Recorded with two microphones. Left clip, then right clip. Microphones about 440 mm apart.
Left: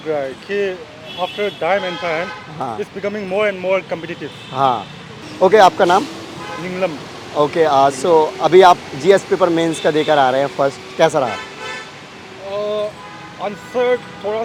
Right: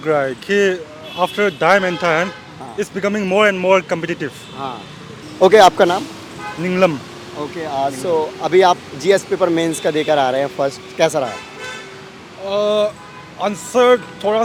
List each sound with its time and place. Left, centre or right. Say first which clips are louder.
0.1 s speech: right 4 dB; right
4.5 s speech: left 15 dB; left
5.4 s speech: right 1 dB; centre
7.3 s speech: left 9 dB; left
8.0 s speech: left 5 dB; centre
12.5 s a sound: right 5 dB; right
13.4 s speech: right 5 dB; right